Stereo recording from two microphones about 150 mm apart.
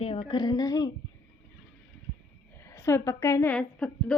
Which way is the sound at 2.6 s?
15° left (ahead or behind).